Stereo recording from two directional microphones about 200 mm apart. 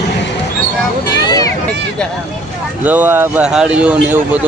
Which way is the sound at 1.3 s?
20° left (ahead or behind).